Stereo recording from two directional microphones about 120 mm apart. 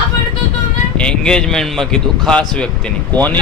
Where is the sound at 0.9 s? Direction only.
5° left (ahead or behind).